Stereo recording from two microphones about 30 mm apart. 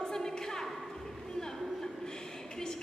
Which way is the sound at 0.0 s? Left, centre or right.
Left.